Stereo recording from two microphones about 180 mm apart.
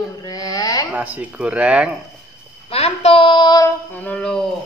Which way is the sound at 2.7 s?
35° left (ahead or behind).